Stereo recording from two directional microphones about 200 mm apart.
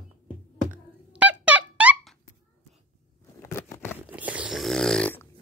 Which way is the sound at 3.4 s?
15° left (ahead or behind).